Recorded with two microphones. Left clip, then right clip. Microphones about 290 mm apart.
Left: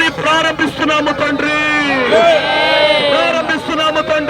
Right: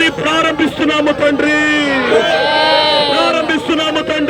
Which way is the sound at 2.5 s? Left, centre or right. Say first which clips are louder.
Right 1 dB; centre.